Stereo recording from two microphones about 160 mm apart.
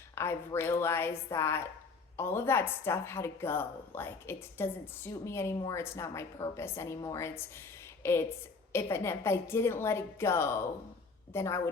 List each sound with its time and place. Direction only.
0.2 s a woman's voice: 15° left (ahead or behind)